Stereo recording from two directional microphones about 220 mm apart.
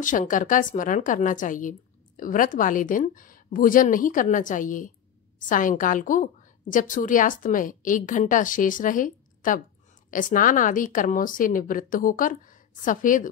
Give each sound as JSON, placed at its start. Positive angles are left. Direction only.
{"t": 0.0, "sound": "a woman's voice", "side_deg": 35}